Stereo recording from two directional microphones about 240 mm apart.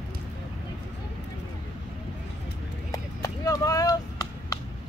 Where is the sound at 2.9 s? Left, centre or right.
Centre.